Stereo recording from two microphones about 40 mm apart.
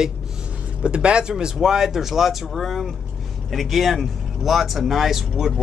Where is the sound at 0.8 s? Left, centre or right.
Right.